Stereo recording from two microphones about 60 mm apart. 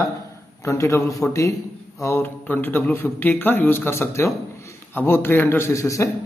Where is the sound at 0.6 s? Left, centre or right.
Left.